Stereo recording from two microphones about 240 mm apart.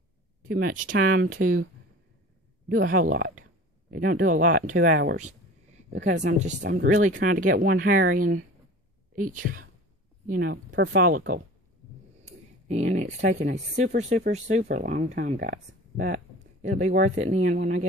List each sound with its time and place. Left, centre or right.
0.4 s speech: right
2.7 s speech: right